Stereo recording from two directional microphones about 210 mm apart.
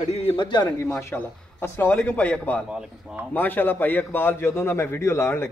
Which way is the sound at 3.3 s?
10° left (ahead or behind).